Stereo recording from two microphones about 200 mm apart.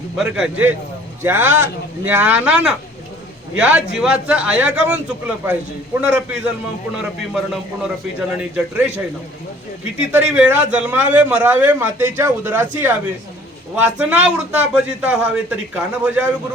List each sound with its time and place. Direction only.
0.2 s a man's voice: centre (ahead or behind)
10.1 s a man's voice: 5° right (ahead or behind)